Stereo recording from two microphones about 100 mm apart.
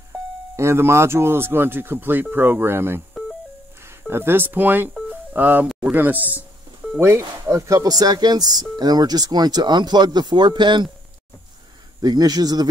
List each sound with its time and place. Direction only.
0.6 s speech: 25° right (ahead or behind)
4.1 s speech: 25° right (ahead or behind)
5.1 s a sound: 20° right (ahead or behind)
5.9 s speech: 15° right (ahead or behind); by 10.9 s 50° right (ahead or behind)
12.0 s speech: 40° right (ahead or behind)